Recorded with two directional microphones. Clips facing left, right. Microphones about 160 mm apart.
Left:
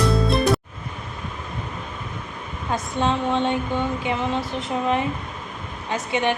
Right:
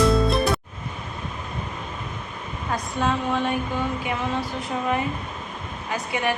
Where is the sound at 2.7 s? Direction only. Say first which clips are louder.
Left 2 dB; 25° left (ahead or behind).